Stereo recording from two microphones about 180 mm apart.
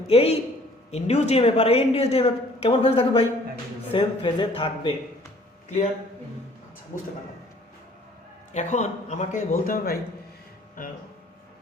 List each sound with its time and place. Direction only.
0.1 s a woman's voice: 35° left (ahead or behind)
5.6 s speech: 40° left (ahead or behind)
8.5 s speech: 40° left (ahead or behind)